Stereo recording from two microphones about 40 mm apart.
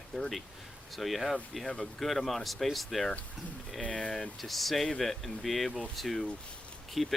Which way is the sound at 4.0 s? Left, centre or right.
Centre.